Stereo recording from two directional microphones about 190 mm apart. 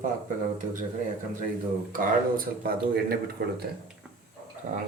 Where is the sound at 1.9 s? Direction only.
50° right (ahead or behind).